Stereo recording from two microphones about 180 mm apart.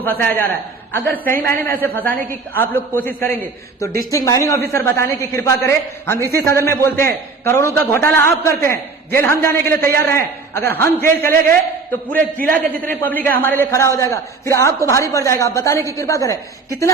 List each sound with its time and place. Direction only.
0.0 s a man's voice: 10° left (ahead or behind)
13.1 s a man's voice: 50° right (ahead or behind)
13.4 s a man's voice: 10° left (ahead or behind)